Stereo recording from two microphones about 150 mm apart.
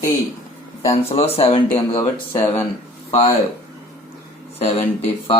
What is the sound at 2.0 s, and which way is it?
Speech, 20° left (ahead or behind).